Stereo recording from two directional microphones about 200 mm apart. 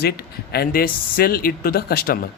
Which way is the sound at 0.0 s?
50° left (ahead or behind).